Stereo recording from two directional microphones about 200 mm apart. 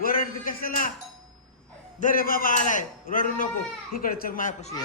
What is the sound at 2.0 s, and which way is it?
A man's voice, 45° left (ahead or behind).